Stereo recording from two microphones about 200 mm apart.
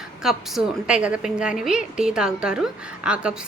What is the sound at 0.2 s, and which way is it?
Speech, centre (ahead or behind).